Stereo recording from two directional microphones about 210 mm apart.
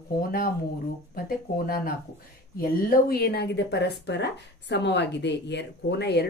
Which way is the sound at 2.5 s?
45° left (ahead or behind).